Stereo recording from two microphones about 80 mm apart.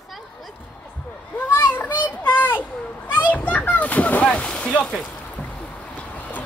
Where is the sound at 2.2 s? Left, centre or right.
Left.